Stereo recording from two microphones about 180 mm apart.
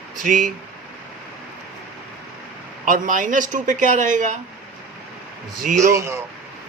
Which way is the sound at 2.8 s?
50° right (ahead or behind).